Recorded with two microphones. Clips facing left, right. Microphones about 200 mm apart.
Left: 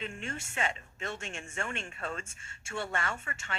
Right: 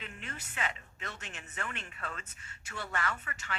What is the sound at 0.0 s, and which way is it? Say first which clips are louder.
Speech: left 6 dB; 25° left (ahead or behind).